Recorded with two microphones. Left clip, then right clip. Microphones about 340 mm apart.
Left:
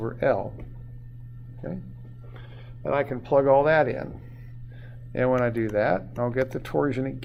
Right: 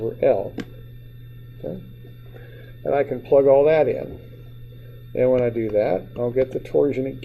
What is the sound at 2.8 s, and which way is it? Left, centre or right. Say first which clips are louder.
Speech: right 4 dB; left.